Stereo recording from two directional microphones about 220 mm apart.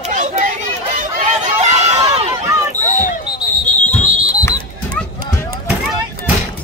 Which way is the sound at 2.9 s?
35° left (ahead or behind).